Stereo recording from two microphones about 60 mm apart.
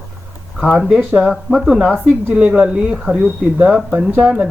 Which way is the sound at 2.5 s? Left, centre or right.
Centre.